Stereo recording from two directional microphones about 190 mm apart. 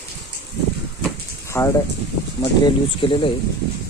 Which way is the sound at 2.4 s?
25° left (ahead or behind).